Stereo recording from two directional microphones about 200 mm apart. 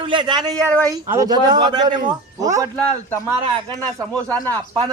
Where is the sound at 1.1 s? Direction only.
20° right (ahead or behind).